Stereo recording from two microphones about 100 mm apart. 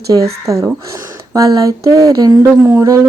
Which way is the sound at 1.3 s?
35° right (ahead or behind).